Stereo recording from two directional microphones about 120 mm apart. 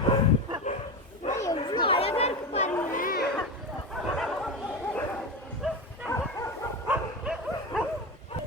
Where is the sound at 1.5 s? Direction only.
45° left (ahead or behind); by 2.7 s 65° left (ahead or behind).